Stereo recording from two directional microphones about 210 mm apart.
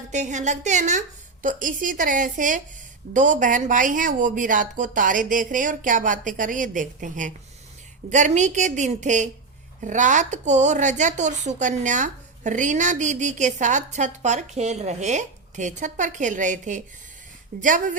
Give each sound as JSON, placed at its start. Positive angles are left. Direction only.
{"t": 0.1, "sound": "a woman's voice", "side_deg": -35}